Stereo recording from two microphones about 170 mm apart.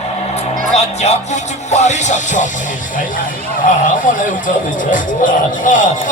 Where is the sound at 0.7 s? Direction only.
40° left (ahead or behind).